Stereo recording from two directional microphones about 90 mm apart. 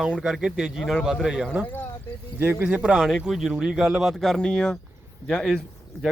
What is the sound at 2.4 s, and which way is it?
Speech, 25° right (ahead or behind).